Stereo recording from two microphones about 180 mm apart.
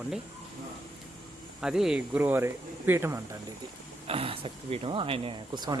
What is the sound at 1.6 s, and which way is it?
Speech, 5° right (ahead or behind).